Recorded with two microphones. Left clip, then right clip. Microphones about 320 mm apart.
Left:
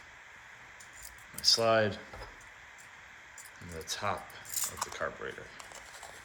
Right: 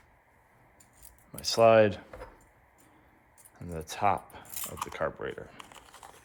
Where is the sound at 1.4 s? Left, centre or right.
Centre.